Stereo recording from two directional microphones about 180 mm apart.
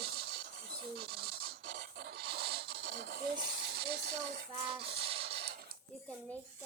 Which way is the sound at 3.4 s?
65° right (ahead or behind).